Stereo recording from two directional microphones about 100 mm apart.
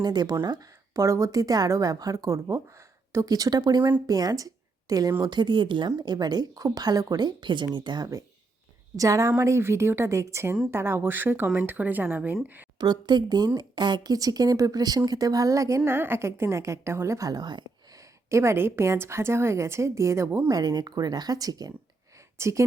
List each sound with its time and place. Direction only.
0.0 s speech: 45° right (ahead or behind)
5.2 s a woman's voice: 50° right (ahead or behind); by 12.6 s 20° right (ahead or behind)
12.8 s speech: 45° right (ahead or behind)
18.3 s a woman's voice: 30° right (ahead or behind)
20.5 s speech: 40° right (ahead or behind)